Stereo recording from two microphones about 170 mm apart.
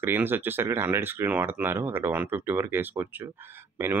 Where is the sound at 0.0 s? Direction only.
15° right (ahead or behind).